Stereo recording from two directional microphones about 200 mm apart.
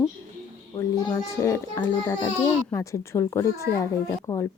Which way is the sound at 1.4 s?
15° left (ahead or behind).